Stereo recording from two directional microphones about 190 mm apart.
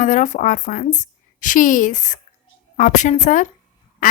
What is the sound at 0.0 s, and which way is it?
A woman's voice, 40° left (ahead or behind).